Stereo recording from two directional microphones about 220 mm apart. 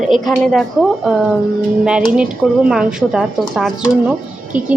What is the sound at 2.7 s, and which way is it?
Speech, 5° right (ahead or behind).